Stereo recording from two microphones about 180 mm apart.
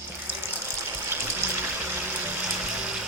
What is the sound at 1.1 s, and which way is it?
Water, 10° right (ahead or behind).